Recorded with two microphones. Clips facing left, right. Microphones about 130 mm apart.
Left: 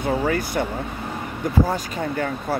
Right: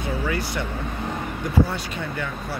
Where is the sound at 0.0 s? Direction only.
45° left (ahead or behind).